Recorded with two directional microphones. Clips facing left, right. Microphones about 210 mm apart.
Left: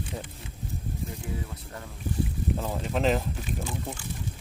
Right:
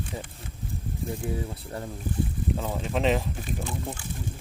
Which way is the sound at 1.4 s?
30° right (ahead or behind).